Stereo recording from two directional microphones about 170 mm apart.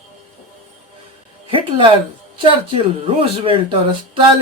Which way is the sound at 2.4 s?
30° right (ahead or behind).